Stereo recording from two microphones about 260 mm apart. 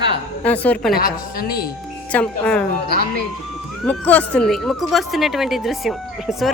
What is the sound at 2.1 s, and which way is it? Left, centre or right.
Speech, centre.